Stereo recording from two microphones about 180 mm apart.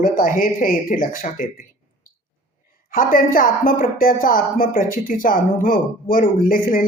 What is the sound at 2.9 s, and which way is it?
Speech, 50° left (ahead or behind).